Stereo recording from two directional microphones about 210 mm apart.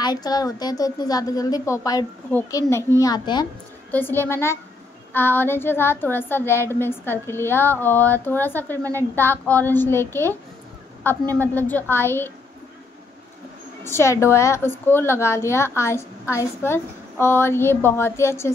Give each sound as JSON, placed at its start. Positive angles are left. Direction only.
{"t": 0.0, "sound": "a woman's voice", "side_deg": 20}
{"t": 11.3, "sound": "a woman's voice", "side_deg": 10}
{"t": 13.8, "sound": "a woman's voice", "side_deg": 15}